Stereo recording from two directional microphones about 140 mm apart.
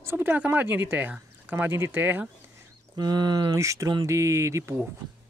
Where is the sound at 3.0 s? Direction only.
30° right (ahead or behind).